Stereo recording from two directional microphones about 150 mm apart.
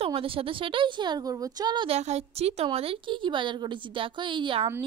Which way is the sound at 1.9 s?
45° right (ahead or behind).